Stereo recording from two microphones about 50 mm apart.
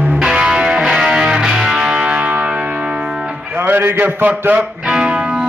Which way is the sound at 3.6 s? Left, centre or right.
Right.